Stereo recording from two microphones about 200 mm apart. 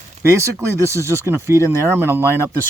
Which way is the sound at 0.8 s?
15° right (ahead or behind).